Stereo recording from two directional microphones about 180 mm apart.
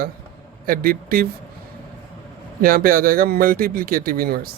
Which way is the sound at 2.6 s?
55° right (ahead or behind).